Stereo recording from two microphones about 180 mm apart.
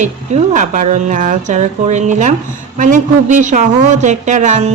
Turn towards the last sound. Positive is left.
turn(degrees=-40)  # may be behind; listen again after turning